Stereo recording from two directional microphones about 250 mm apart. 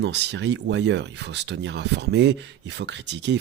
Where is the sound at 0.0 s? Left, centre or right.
Right.